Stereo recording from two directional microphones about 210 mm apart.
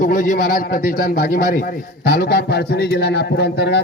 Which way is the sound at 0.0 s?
40° left (ahead or behind).